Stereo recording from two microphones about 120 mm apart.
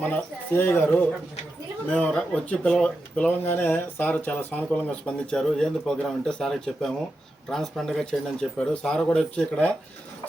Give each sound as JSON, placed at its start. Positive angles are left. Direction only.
{"t": 0.0, "sound": "speech", "side_deg": 15}